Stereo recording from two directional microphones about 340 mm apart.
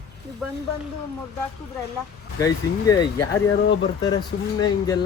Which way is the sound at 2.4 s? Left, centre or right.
Centre.